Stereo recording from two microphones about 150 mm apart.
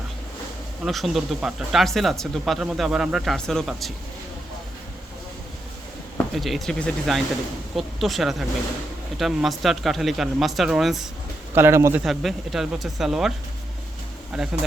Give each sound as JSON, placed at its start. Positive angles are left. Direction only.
{"t": 0.9, "sound": "speech", "side_deg": 0}
{"t": 6.3, "sound": "speech", "side_deg": 0}
{"t": 11.5, "sound": "a man's voice", "side_deg": -15}
{"t": 12.0, "sound": "speech", "side_deg": 0}
{"t": 14.5, "sound": "a man's voice", "side_deg": -10}